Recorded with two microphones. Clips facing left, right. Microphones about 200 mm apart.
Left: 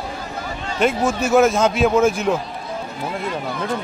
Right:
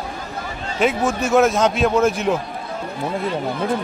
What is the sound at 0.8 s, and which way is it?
A man's voice, centre (ahead or behind).